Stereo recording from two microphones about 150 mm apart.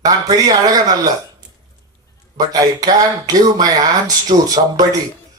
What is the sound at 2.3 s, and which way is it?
Speech, 25° right (ahead or behind).